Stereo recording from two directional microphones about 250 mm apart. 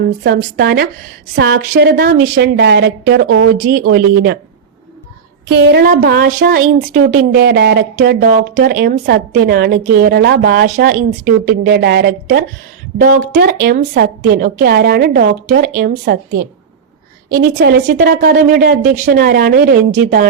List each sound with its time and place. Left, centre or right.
0.2 s a woman's voice: right
5.5 s a woman's voice: right